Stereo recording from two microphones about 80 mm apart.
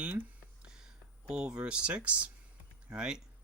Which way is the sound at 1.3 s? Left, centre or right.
Centre.